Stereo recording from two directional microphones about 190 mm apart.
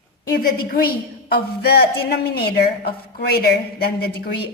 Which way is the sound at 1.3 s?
55° left (ahead or behind).